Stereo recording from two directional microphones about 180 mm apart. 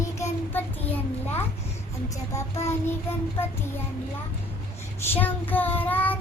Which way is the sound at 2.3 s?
15° left (ahead or behind).